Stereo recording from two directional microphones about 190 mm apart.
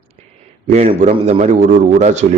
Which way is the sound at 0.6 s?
35° right (ahead or behind).